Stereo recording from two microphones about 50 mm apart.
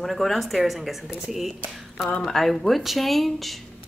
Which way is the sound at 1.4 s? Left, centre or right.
Centre.